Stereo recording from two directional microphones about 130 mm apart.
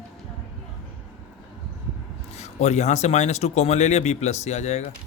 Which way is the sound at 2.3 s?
60° left (ahead or behind).